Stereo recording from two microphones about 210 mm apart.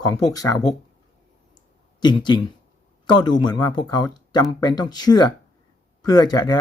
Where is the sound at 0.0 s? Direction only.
15° left (ahead or behind).